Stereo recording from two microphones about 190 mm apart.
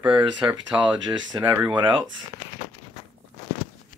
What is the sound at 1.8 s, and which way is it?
Speech, 25° right (ahead or behind).